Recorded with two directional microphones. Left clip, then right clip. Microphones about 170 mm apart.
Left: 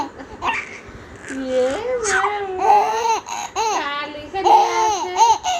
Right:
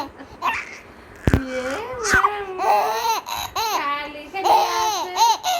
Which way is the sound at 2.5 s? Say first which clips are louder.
Left 7 dB; 15° right (ahead or behind).